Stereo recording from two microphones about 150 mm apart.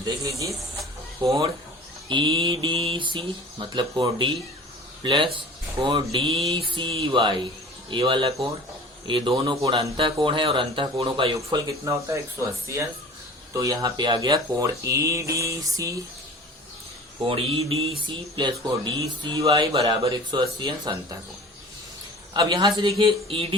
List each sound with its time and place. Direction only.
0.0 s speech: 20° right (ahead or behind)
2.0 s speech: 30° right (ahead or behind)
11.3 s speech: 20° right (ahead or behind)
17.2 s speech: 40° right (ahead or behind)
22.3 s a man's voice: 25° right (ahead or behind)
23.0 s speech: 35° right (ahead or behind)